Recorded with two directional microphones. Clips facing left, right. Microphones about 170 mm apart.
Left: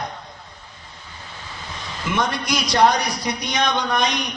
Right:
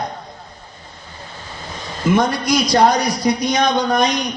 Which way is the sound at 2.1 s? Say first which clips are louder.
Right 6 dB; 40° right (ahead or behind).